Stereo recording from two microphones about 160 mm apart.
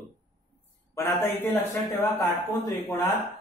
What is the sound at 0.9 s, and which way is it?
Speech, 15° left (ahead or behind).